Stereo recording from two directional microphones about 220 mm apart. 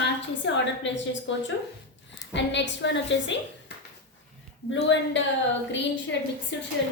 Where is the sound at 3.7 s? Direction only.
50° left (ahead or behind).